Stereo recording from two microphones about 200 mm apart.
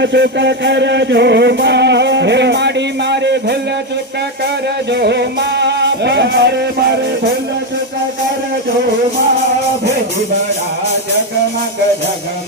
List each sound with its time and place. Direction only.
0.0 s music: 60° right (ahead or behind)
4.9 s music: 55° right (ahead or behind)